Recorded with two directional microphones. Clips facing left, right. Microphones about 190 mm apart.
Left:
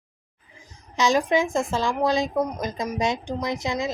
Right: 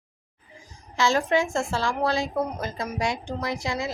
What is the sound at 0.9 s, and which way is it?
A woman's voice, 15° left (ahead or behind).